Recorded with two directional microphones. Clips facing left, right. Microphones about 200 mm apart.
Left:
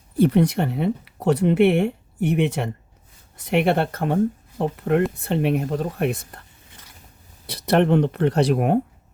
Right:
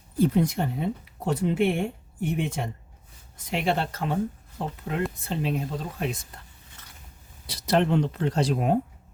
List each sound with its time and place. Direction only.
0.2 s speech: 70° left (ahead or behind)
7.4 s speech: 60° left (ahead or behind)